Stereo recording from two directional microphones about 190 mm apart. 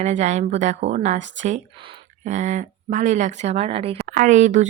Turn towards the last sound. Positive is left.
turn(degrees=-40)  # may be behind; listen again after turning